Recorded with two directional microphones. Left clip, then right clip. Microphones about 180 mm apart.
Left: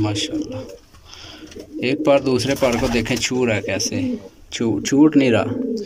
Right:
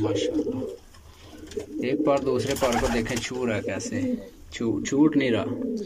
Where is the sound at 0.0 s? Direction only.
5° left (ahead or behind).